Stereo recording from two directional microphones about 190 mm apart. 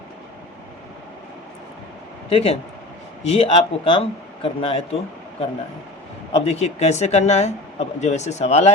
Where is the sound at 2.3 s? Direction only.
30° left (ahead or behind).